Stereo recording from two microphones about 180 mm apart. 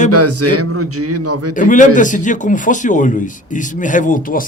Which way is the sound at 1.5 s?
45° left (ahead or behind).